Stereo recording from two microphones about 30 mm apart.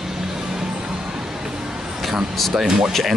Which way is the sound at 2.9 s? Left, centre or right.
Centre.